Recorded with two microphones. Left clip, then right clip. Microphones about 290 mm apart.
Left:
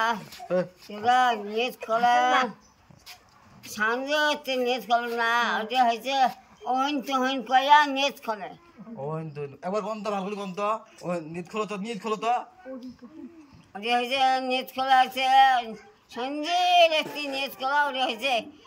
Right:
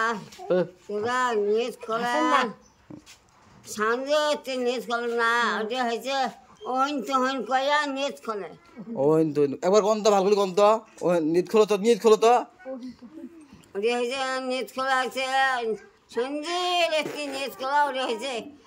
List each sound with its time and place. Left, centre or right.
0.5 s speech: centre
0.9 s speech: centre
3.6 s speech: centre
9.1 s a man's voice: right
13.7 s speech: centre